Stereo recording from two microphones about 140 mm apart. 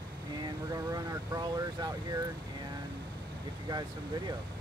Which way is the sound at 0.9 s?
30° right (ahead or behind).